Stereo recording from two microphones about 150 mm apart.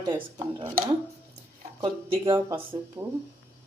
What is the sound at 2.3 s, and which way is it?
Speech, 20° right (ahead or behind).